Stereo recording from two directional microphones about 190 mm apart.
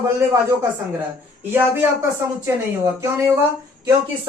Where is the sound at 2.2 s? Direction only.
15° right (ahead or behind).